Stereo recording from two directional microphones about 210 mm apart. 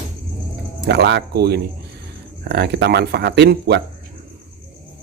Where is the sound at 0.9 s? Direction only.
55° right (ahead or behind).